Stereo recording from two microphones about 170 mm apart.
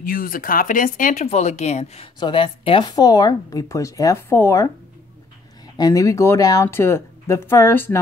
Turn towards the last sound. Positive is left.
turn(degrees=10)  # may be behind; listen again after turning